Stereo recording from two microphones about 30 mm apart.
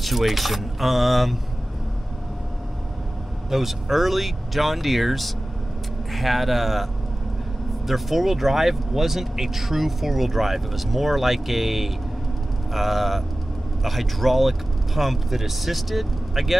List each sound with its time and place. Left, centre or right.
0.0 s speech: centre
3.4 s speech: centre